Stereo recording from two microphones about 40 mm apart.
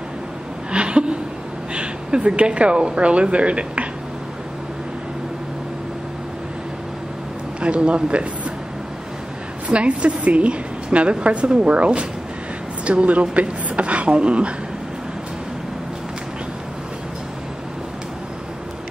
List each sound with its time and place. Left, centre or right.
0.7 s a sound: right
1.7 s a woman's voice: right
7.6 s speech: right
9.7 s a woman's voice: right